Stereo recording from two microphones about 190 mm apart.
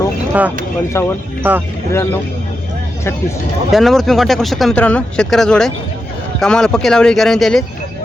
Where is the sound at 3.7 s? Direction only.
Centre (ahead or behind).